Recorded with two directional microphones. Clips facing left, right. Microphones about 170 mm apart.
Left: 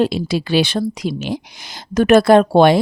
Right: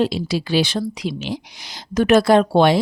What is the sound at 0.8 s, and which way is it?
Speech, 45° left (ahead or behind).